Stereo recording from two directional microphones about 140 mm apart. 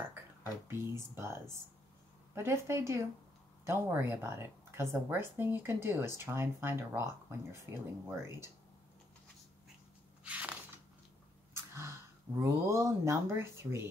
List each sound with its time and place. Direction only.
0.7 s a woman's voice: 15° right (ahead or behind)
10.2 s a sound: 10° right (ahead or behind)
11.5 s speech: 20° right (ahead or behind)